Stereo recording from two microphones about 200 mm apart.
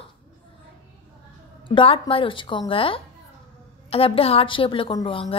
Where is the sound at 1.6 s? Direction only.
25° left (ahead or behind).